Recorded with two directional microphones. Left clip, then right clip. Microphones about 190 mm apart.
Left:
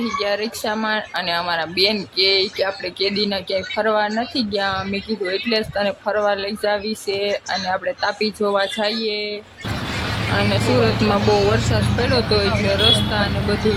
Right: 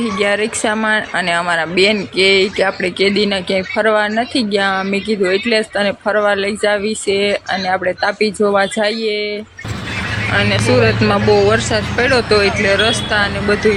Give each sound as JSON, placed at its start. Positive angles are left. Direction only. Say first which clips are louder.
{"t": 0.2, "sound": "speech", "louder": "right 9 dB", "side_deg": -20}
{"t": 10.3, "sound": "speech", "louder": "right 5 dB", "side_deg": -10}